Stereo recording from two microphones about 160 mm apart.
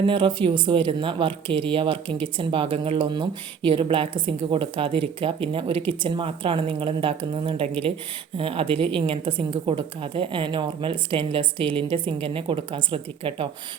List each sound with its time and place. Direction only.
0.0 s speech: 30° right (ahead or behind)